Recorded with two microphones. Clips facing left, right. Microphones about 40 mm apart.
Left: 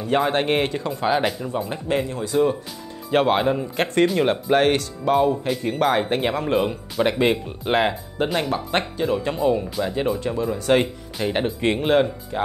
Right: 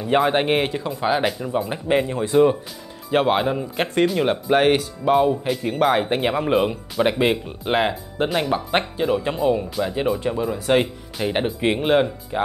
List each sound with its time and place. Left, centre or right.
0.3 s speech: centre
2.0 s speech: right
3.1 s speech: centre
8.5 s speech: centre